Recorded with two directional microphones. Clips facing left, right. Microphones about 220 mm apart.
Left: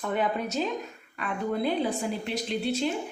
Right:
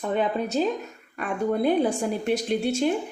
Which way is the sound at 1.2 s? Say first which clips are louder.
Right 5 dB; 50° right (ahead or behind).